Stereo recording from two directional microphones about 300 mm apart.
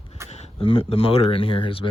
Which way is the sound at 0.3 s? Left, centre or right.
Centre.